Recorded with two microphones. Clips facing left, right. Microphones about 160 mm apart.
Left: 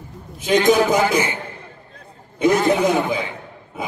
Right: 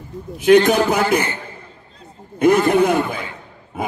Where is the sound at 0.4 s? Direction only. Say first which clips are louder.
Right 3 dB; 60° right (ahead or behind).